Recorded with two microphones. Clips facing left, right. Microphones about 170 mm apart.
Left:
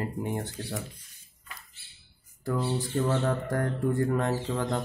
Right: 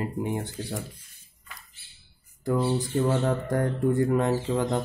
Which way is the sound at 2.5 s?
15° right (ahead or behind).